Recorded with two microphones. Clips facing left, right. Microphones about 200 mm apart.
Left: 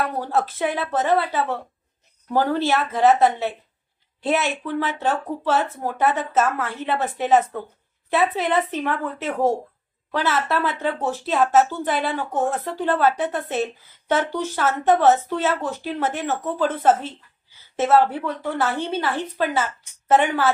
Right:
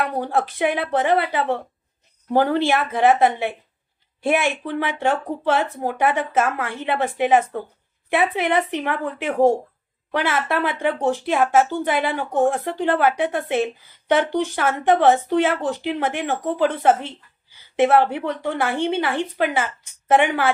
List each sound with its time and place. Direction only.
0.2 s speech: 15° right (ahead or behind)